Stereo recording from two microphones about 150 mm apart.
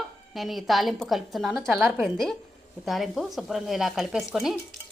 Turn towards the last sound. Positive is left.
turn(degrees=0)  # may be behind; listen again after turning